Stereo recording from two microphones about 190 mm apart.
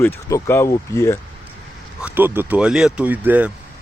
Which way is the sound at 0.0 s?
15° left (ahead or behind).